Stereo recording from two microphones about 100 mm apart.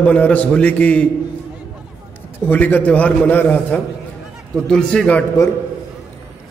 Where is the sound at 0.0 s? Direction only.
15° left (ahead or behind).